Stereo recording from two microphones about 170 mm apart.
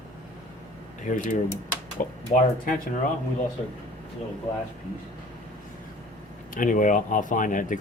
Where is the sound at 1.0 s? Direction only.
50° left (ahead or behind).